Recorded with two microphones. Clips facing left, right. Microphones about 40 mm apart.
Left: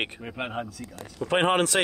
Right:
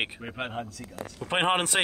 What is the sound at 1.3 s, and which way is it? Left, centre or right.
Speech, centre.